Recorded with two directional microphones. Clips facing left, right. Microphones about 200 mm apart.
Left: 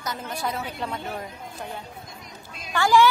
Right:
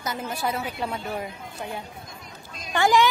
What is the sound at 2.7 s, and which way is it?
Speech, 20° right (ahead or behind).